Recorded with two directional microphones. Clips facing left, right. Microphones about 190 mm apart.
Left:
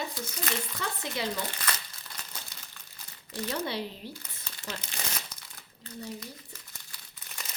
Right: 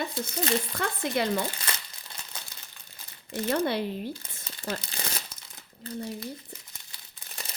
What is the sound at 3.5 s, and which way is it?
Speech, 55° right (ahead or behind).